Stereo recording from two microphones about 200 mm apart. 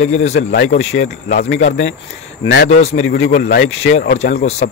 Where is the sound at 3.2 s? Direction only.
50° left (ahead or behind).